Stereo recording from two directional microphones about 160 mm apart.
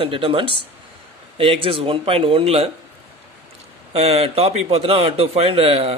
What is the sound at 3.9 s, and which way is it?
A man's voice, 40° right (ahead or behind).